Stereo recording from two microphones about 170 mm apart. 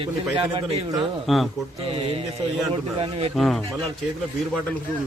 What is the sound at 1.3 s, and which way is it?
Speech, centre (ahead or behind).